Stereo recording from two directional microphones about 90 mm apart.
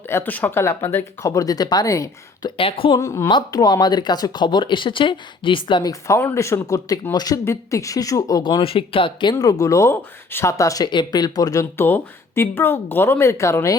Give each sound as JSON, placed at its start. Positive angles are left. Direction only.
{"t": 0.1, "sound": "speech", "side_deg": 25}
{"t": 2.6, "sound": "a woman's voice", "side_deg": 90}
{"t": 3.0, "sound": "speech", "side_deg": 35}
{"t": 5.8, "sound": "speech", "side_deg": 35}
{"t": 7.4, "sound": "speech", "side_deg": 35}
{"t": 8.4, "sound": "speech", "side_deg": 65}
{"t": 9.4, "sound": "speech", "side_deg": 40}
{"t": 10.8, "sound": "speech", "side_deg": 50}
{"t": 11.8, "sound": "speech", "side_deg": 25}